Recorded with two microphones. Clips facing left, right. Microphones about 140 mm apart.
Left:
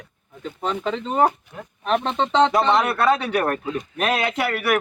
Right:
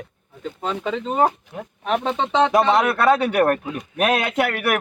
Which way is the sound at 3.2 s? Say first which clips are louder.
Right 4 dB; 55° right (ahead or behind).